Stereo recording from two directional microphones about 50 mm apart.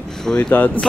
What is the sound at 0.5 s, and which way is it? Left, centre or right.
Speech, left.